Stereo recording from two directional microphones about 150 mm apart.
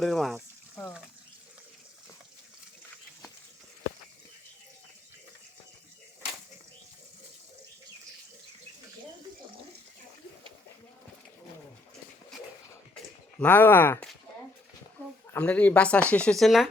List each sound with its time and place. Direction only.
0.0 s speech: centre (ahead or behind)
13.4 s speech: 15° left (ahead or behind)
15.3 s speech: 10° left (ahead or behind)